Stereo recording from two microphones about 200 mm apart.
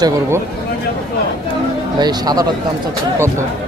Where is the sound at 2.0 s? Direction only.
20° right (ahead or behind).